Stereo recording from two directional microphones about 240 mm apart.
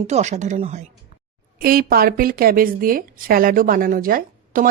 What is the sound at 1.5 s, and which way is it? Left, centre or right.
A woman's voice, right.